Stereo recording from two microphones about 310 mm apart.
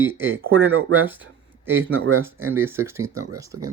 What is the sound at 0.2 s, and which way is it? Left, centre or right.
Speech, right.